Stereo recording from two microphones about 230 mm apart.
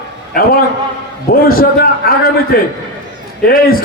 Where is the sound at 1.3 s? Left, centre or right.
Left.